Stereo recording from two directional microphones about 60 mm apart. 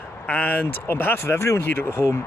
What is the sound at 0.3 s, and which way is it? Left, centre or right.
Speech, left.